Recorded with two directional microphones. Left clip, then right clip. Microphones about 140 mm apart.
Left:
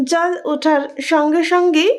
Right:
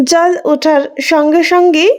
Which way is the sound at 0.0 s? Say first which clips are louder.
Right 7 dB; 45° right (ahead or behind).